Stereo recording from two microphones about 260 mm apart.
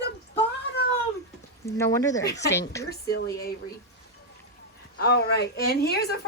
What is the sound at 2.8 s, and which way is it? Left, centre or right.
Speech, left.